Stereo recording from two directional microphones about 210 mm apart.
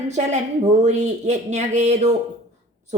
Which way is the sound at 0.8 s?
35° right (ahead or behind).